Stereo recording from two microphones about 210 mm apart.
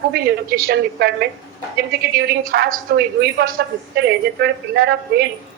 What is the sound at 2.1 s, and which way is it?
A woman's voice, 50° right (ahead or behind).